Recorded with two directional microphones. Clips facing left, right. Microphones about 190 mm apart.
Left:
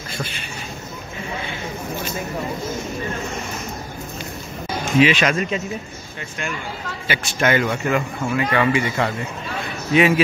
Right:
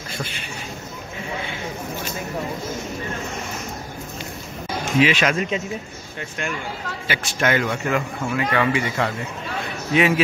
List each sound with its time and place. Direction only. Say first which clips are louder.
0.2 s speech: left 2 dB; 15° right (ahead or behind)
5.0 s a man's voice: left 2 dB; 5° right (ahead or behind)
7.1 s a man's voice: left 2 dB; 5° left (ahead or behind)